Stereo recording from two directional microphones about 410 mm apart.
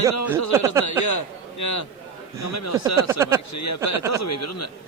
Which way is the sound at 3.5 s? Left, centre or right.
Left.